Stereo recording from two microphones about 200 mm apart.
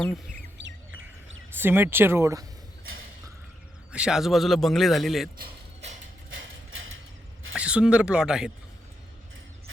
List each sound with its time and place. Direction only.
0.6 s chirp: 80° right
1.5 s speech: 10° right (ahead or behind)
3.9 s a man's voice: 5° right (ahead or behind)
6.3 s a sound: 80° right
7.5 s speech: 5° right (ahead or behind)